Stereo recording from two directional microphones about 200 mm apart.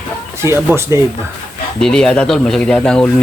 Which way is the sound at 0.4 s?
15° right (ahead or behind).